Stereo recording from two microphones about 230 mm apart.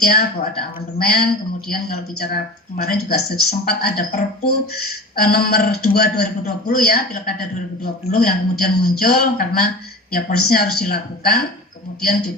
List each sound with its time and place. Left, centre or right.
0.0 s speech: left